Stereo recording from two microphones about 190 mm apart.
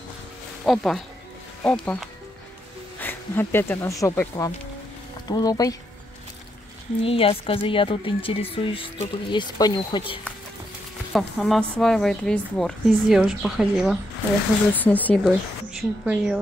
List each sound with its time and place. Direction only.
0.7 s a woman's voice: centre (ahead or behind); by 5.8 s 20° left (ahead or behind)
7.0 s speech: 30° left (ahead or behind)
11.1 s a woman's voice: centre (ahead or behind)
14.7 s speech: 10° left (ahead or behind)
15.2 s a woman's voice: 5° right (ahead or behind)